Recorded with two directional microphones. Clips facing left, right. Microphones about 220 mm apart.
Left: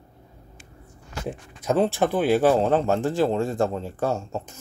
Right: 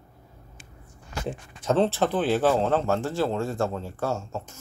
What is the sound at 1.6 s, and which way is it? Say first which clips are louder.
Speech: left 1 dB; 10° left (ahead or behind).